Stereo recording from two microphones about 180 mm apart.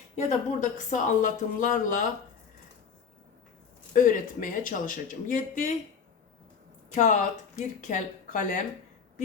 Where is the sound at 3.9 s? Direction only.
50° left (ahead or behind).